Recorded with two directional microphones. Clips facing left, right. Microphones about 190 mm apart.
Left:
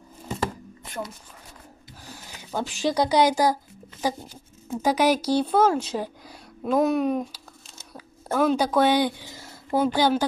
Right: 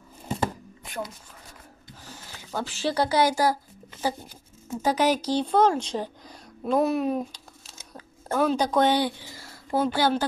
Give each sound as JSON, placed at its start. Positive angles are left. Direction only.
{"t": 0.8, "sound": "speech", "side_deg": 0}
{"t": 2.0, "sound": "speech", "side_deg": 15}
{"t": 4.8, "sound": "a woman's voice", "side_deg": 10}